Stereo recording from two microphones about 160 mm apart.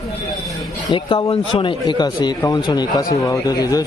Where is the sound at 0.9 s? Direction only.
30° left (ahead or behind).